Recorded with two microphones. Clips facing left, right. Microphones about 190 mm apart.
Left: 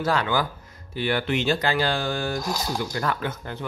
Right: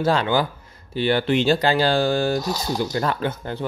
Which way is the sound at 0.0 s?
30° right (ahead or behind).